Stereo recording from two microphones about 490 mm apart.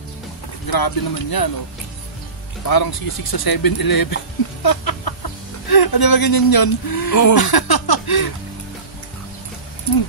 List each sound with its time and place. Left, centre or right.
0.7 s speech: left
2.6 s speech: left